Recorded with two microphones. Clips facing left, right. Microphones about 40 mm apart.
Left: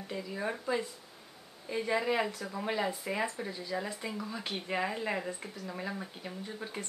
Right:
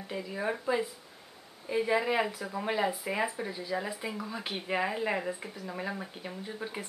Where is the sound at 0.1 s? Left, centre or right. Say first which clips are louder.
Right 3 dB; centre.